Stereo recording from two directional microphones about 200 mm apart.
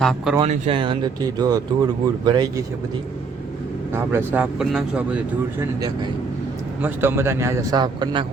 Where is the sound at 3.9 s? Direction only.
10° right (ahead or behind).